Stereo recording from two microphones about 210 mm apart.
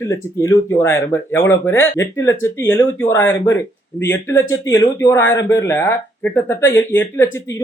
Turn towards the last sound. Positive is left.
turn(degrees=10)  # may be behind; listen again after turning